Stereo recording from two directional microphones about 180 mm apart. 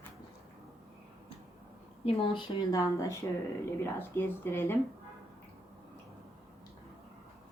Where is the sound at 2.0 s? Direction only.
30° left (ahead or behind); by 4.8 s 15° left (ahead or behind).